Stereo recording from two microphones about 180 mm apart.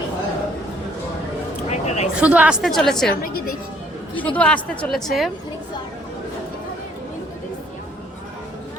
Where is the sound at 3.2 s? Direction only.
55° left (ahead or behind).